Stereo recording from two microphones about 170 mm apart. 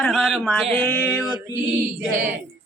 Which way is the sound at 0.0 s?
Centre (ahead or behind).